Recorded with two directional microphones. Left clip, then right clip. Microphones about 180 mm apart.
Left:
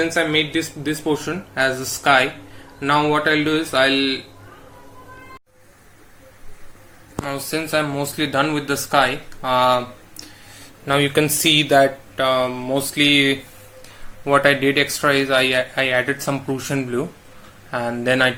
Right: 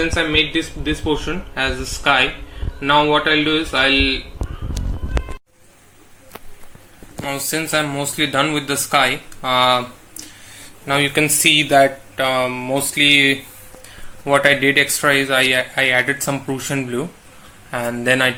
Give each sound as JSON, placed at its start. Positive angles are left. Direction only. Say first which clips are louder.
{"t": 0.0, "sound": "speech", "louder": "right 2 dB", "side_deg": 10}
{"t": 7.3, "sound": "speech", "louder": "right 2 dB", "side_deg": 0}
{"t": 10.6, "sound": "speech", "louder": "right 1 dB", "side_deg": 20}